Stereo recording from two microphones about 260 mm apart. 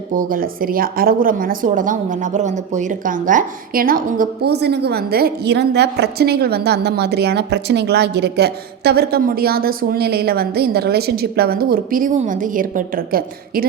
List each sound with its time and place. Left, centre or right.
0.2 s speech: right